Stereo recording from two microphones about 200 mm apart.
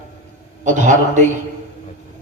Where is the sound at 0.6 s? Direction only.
40° right (ahead or behind).